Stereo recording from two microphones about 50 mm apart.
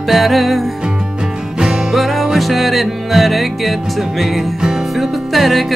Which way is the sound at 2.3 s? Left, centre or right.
Centre.